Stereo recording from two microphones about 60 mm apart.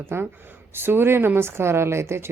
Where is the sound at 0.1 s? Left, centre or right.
Right.